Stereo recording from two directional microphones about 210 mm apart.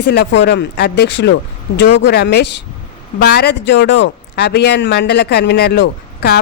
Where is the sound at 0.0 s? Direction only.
50° left (ahead or behind).